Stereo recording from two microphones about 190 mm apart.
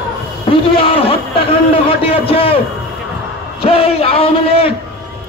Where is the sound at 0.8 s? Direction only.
30° left (ahead or behind).